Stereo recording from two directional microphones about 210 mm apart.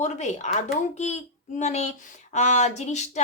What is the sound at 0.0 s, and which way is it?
A woman's voice, 35° left (ahead or behind).